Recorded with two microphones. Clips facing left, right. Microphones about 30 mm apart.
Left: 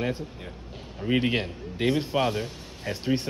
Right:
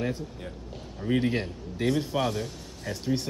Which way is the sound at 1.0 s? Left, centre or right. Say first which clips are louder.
Left 1 dB; left.